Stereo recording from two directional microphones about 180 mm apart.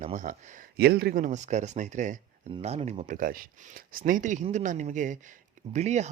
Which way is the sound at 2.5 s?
35° right (ahead or behind).